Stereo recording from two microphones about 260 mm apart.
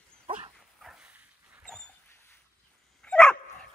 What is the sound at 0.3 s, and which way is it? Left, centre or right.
Dog, right.